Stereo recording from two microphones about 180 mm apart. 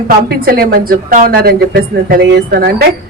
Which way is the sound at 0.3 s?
55° right (ahead or behind).